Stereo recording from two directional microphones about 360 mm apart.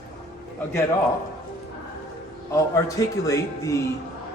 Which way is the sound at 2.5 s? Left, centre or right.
Centre.